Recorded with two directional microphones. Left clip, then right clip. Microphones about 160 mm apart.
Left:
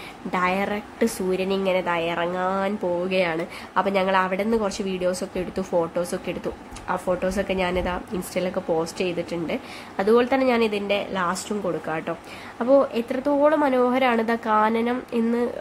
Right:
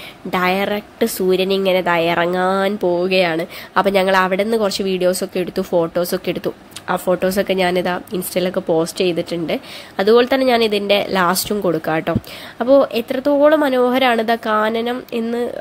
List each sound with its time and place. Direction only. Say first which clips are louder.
0.3 s a woman's voice: right 6 dB; 20° right (ahead or behind)